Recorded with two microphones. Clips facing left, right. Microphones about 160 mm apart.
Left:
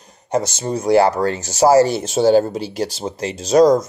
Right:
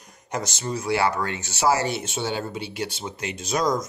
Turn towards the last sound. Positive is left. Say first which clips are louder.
# left 12 dB
turn(degrees=35)  # may be behind; listen again after turning